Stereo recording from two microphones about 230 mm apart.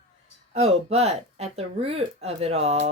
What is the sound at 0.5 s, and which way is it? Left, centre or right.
Speech, right.